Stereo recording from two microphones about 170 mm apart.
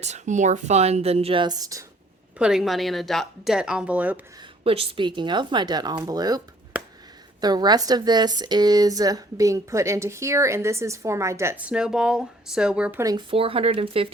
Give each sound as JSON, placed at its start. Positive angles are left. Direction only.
{"t": 0.0, "sound": "speech", "side_deg": -45}
{"t": 2.4, "sound": "speech", "side_deg": 0}
{"t": 4.4, "sound": "a woman's voice", "side_deg": -35}
{"t": 7.4, "sound": "speech", "side_deg": -25}
{"t": 13.1, "sound": "speech", "side_deg": -30}